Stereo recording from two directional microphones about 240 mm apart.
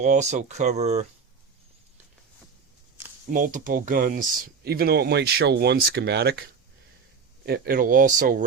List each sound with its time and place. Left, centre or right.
0.0 s speech: right
3.2 s speech: right
7.4 s speech: right